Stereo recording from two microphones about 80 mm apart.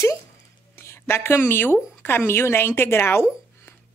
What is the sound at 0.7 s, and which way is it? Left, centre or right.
Speech, left.